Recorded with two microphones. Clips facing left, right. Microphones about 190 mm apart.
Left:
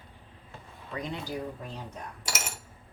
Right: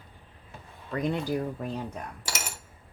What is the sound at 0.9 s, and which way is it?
Speech, 55° right (ahead or behind).